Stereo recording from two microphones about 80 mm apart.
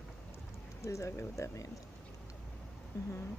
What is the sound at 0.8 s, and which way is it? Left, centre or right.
Speech, left.